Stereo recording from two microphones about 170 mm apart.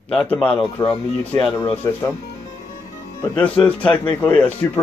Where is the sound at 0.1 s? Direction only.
5° left (ahead or behind).